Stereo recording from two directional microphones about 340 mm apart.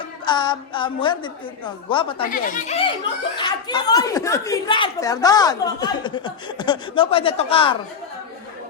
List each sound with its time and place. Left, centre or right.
0.3 s speech: centre